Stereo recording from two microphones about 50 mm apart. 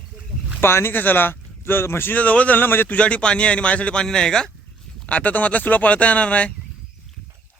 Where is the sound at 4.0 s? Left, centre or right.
Centre.